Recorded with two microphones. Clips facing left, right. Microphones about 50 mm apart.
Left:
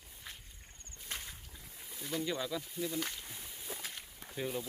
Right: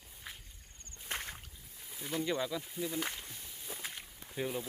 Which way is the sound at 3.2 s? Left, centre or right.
Centre.